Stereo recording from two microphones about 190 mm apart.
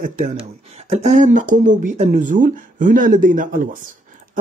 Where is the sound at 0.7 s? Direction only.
35° right (ahead or behind).